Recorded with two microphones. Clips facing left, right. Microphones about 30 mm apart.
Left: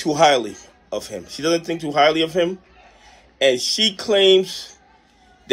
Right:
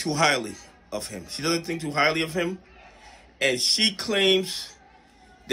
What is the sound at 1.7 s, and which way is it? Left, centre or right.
Speech, left.